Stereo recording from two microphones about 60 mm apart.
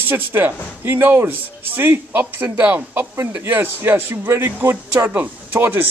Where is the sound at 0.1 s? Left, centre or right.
Right.